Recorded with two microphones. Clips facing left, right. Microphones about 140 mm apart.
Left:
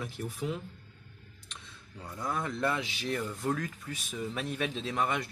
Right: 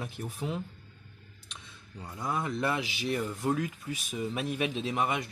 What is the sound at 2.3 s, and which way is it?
A man's voice, 10° right (ahead or behind).